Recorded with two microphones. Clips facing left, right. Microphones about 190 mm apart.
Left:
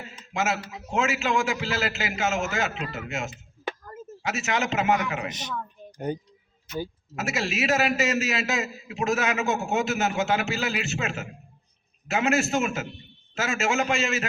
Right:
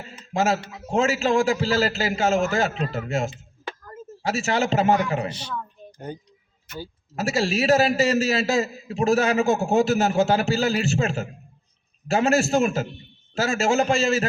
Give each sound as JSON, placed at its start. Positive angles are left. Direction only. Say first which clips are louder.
{"t": 0.3, "sound": "a man's voice", "louder": "right 5 dB", "side_deg": -35}
{"t": 5.3, "sound": "speech", "louder": "right 1 dB", "side_deg": 20}
{"t": 6.7, "sound": "speech", "louder": "left 4 dB", "side_deg": -55}
{"t": 7.2, "sound": "a man's voice", "louder": "right 5 dB", "side_deg": -30}